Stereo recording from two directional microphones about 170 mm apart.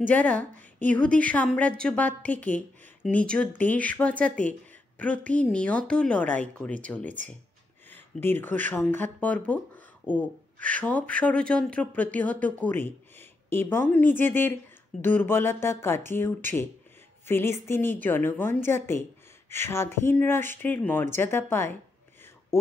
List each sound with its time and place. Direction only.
0.1 s speech: 10° left (ahead or behind)